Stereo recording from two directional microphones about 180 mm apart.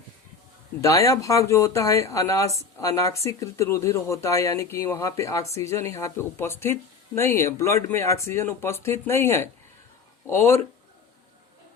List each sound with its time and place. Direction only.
0.8 s speech: 15° left (ahead or behind)